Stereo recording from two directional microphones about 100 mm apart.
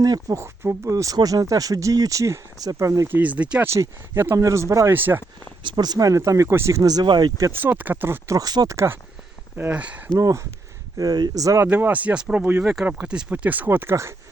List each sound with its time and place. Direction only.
0.0 s speech: 40° right (ahead or behind)
0.4 s speech: 30° right (ahead or behind)
3.1 s speech: 15° right (ahead or behind)
3.7 s speech: 25° right (ahead or behind)
4.9 s speech: 20° right (ahead or behind)
5.6 s speech: 45° right (ahead or behind)
7.5 s speech: 20° right (ahead or behind)
8.4 s speech: 40° right (ahead or behind)
8.7 s speech: 30° right (ahead or behind)
9.6 s speech: 15° right (ahead or behind)
10.2 s speech: 35° right (ahead or behind)
11.6 s speech: 20° right (ahead or behind)